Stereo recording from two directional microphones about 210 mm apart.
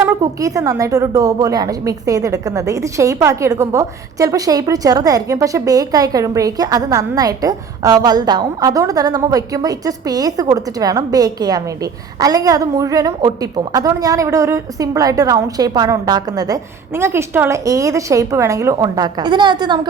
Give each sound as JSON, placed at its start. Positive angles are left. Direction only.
{"t": 0.0, "sound": "a woman's voice", "side_deg": -15}